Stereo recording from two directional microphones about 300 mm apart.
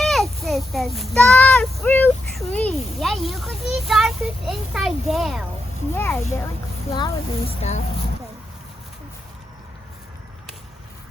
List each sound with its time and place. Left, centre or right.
0.0 s a child's voice: centre